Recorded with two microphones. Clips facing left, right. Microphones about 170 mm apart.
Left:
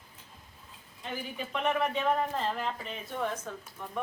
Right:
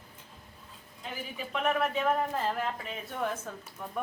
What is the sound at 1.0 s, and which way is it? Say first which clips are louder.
Speech: left 2 dB; centre (ahead or behind).